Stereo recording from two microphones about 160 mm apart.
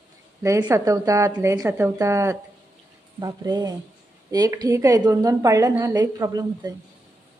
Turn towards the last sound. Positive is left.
turn(degrees=-25)  # may be behind; listen again after turning